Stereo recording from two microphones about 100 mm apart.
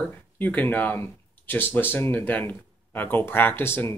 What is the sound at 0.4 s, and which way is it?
Speech, 15° left (ahead or behind).